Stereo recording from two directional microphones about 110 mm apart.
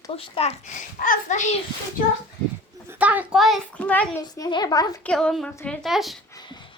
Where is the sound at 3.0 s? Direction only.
15° right (ahead or behind).